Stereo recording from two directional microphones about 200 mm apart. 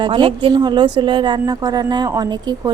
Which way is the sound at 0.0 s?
25° right (ahead or behind).